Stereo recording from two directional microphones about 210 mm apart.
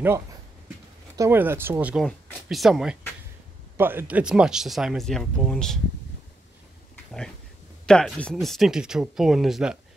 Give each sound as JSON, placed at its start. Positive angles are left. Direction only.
{"t": 1.1, "sound": "speech", "side_deg": -10}
{"t": 7.8, "sound": "speech", "side_deg": 5}